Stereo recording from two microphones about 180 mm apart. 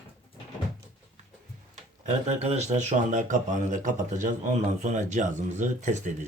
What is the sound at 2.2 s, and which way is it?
A man's voice, 35° right (ahead or behind).